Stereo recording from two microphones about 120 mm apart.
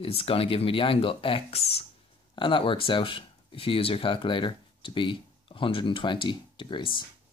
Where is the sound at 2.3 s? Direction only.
45° left (ahead or behind).